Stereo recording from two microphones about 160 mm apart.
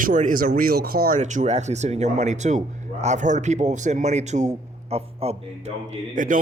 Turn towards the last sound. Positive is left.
turn(degrees=-50)  # may be behind; listen again after turning